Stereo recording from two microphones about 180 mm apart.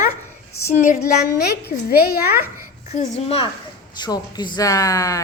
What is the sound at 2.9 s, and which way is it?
A woman's voice, 40° left (ahead or behind).